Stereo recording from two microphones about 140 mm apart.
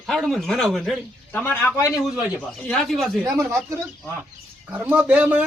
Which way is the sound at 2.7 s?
Centre (ahead or behind).